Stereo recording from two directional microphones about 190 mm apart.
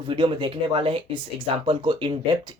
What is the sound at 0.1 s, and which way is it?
Speech, 25° right (ahead or behind).